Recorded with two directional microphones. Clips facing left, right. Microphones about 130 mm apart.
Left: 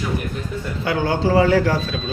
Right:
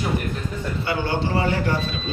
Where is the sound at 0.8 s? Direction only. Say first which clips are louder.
Left 5 dB; 90° left.